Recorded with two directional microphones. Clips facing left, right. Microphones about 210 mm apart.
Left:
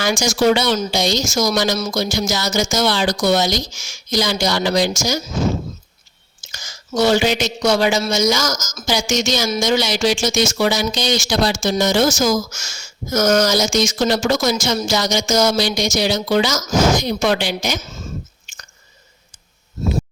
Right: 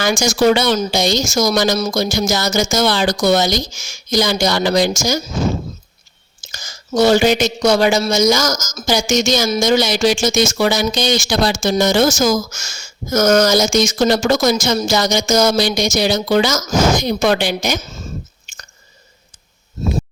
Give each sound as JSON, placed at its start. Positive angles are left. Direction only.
{"t": 0.0, "sound": "speech", "side_deg": -50}
{"t": 6.5, "sound": "speech", "side_deg": -40}